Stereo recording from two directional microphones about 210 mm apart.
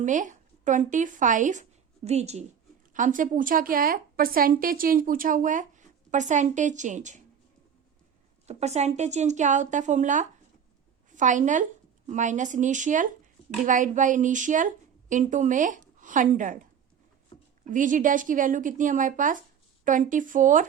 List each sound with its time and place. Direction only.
0.0 s a woman's voice: 35° right (ahead or behind)
8.4 s a woman's voice: 30° right (ahead or behind)
17.3 s a sound: 30° left (ahead or behind)
17.7 s a woman's voice: 40° right (ahead or behind)